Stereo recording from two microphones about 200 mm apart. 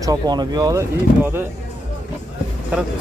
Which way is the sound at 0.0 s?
20° right (ahead or behind).